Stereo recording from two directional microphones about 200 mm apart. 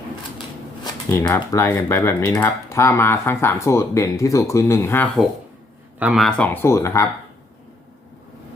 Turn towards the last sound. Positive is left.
turn(degrees=15)  # may be behind; listen again after turning